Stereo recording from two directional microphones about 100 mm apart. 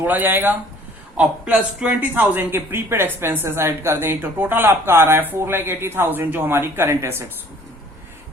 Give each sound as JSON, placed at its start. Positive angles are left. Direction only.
{"t": 0.0, "sound": "speech", "side_deg": -20}